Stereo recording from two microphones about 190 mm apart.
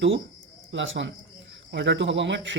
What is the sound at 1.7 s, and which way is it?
Speech, 65° right (ahead or behind).